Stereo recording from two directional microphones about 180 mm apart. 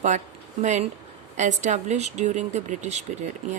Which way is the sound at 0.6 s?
40° right (ahead or behind).